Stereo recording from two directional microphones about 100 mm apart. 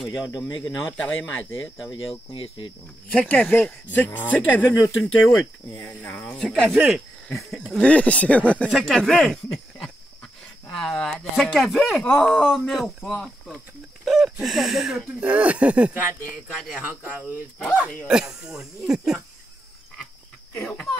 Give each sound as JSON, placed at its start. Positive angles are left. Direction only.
{"t": 0.6, "sound": "speech", "side_deg": 15}
{"t": 2.3, "sound": "cricket", "side_deg": 60}
{"t": 3.2, "sound": "speech", "side_deg": 15}
{"t": 5.0, "sound": "speech", "side_deg": 5}
{"t": 6.7, "sound": "speech", "side_deg": -5}
{"t": 7.7, "sound": "speech", "side_deg": 15}
{"t": 17.6, "sound": "speech", "side_deg": -5}
{"t": 20.7, "sound": "speech", "side_deg": 5}